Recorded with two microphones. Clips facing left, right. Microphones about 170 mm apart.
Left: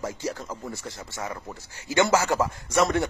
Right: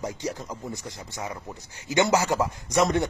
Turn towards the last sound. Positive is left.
turn(degrees=-20)  # may be behind; listen again after turning